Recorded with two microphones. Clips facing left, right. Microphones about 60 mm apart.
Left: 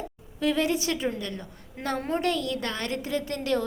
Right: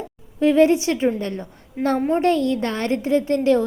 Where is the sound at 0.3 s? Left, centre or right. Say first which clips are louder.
Right 10 dB; right.